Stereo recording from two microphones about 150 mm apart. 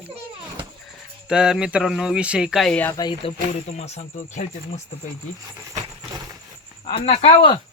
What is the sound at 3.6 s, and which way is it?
Speech, 45° left (ahead or behind).